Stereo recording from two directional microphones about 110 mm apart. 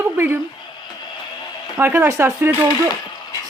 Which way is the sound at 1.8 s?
20° right (ahead or behind).